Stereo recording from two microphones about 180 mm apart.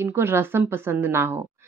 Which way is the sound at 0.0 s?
15° right (ahead or behind).